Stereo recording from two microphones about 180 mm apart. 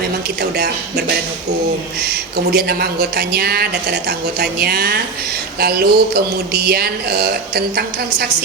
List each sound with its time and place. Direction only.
0.5 s speech: 65° right (ahead or behind)
2.0 s speech: 60° right (ahead or behind)